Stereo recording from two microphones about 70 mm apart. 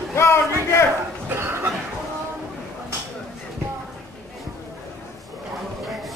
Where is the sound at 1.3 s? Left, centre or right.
Right.